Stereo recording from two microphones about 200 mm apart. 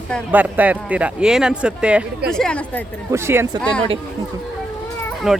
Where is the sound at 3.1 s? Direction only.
15° right (ahead or behind).